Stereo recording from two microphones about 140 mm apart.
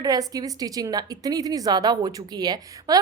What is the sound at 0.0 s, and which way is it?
A woman's voice, 25° right (ahead or behind).